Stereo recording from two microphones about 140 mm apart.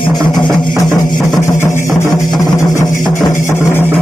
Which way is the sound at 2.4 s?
25° left (ahead or behind).